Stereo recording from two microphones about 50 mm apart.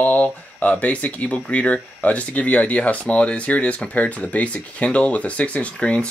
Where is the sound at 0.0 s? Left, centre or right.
Left.